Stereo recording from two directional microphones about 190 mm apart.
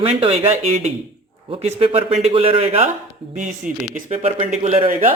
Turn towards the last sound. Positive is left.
turn(degrees=-30)  # may be behind; listen again after turning